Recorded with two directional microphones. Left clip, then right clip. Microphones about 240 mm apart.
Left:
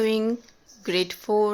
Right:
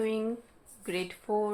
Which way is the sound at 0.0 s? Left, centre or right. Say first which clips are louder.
Left 8 dB; left.